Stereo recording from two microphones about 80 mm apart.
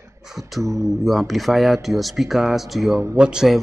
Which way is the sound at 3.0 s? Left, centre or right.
Centre.